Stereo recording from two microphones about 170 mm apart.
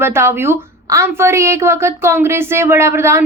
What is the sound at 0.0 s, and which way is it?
A woman's voice, 15° right (ahead or behind).